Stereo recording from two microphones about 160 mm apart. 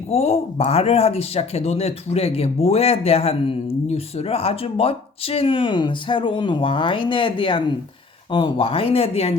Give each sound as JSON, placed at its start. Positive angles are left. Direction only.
{"t": 0.1, "sound": "speech", "side_deg": 40}